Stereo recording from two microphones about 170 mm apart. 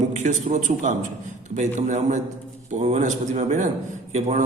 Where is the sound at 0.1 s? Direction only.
45° right (ahead or behind).